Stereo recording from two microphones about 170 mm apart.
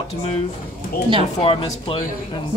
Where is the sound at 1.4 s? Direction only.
35° left (ahead or behind).